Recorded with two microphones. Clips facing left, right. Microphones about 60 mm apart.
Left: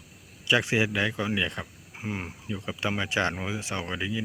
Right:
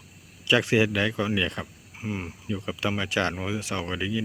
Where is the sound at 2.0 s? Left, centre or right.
Left.